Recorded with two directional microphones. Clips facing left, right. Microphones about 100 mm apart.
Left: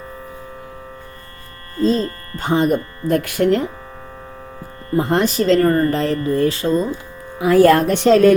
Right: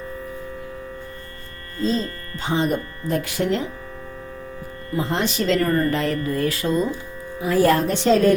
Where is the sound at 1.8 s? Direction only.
50° left (ahead or behind).